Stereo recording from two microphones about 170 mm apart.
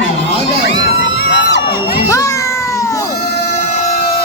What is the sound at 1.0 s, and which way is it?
Crowd, 90° left.